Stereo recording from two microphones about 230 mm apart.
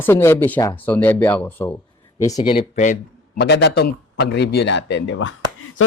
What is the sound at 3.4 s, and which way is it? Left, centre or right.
A man's voice, left.